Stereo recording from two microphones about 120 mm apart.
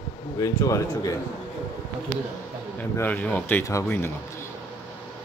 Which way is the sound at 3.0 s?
15° left (ahead or behind).